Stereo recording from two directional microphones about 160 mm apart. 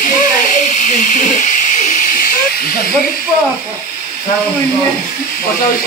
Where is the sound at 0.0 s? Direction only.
55° left (ahead or behind).